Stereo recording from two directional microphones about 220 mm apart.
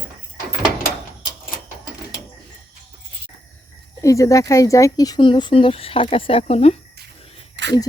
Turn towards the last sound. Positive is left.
turn(degrees=-55)  # may be behind; listen again after turning